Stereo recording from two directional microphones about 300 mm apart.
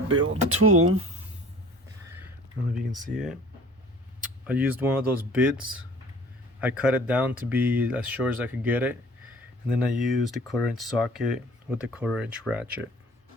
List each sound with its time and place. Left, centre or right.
0.2 s speech: right
2.7 s speech: centre
4.4 s speech: centre